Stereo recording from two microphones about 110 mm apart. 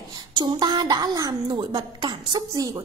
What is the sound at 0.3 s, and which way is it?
A woman's voice, 40° right (ahead or behind).